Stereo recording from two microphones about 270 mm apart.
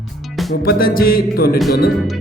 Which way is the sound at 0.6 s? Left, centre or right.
Left.